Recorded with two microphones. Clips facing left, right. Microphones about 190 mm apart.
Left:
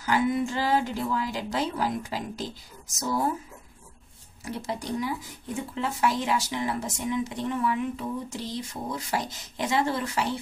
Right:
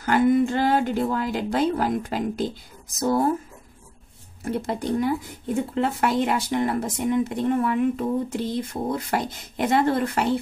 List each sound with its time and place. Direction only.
0.0 s speech: 55° right (ahead or behind)
4.5 s speech: 55° right (ahead or behind)